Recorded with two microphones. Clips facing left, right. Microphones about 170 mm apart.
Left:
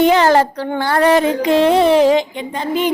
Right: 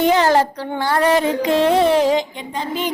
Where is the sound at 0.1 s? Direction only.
75° left (ahead or behind).